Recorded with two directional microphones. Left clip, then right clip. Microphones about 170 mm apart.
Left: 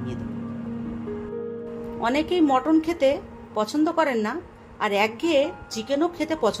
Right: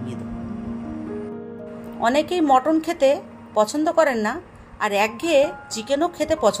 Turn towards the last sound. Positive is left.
turn(degrees=-5)  # may be behind; listen again after turning